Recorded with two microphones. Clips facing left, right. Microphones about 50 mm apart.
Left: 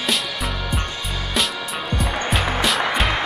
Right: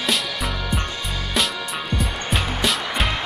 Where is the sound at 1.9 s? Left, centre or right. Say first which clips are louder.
Left 3 dB; centre.